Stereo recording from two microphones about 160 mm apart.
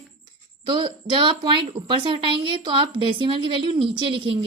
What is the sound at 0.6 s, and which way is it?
Speech, 30° right (ahead or behind).